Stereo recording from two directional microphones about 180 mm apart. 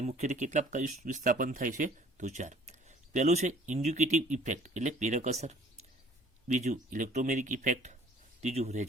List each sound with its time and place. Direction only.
0.0 s speech: 40° right (ahead or behind)